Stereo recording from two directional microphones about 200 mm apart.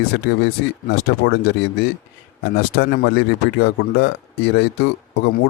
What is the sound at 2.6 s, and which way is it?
A man's voice, 55° left (ahead or behind).